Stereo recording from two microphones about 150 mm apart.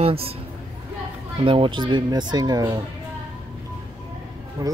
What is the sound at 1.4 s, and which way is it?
Speech, 35° right (ahead or behind).